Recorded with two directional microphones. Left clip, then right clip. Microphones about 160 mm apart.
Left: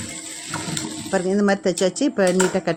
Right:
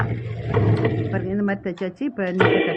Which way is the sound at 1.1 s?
35° left (ahead or behind).